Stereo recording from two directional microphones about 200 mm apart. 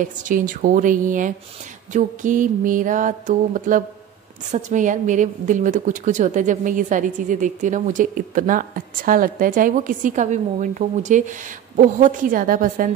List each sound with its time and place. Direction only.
0.0 s a woman's voice: 40° right (ahead or behind)